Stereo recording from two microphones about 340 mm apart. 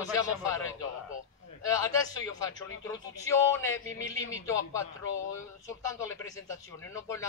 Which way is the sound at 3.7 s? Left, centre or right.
Left.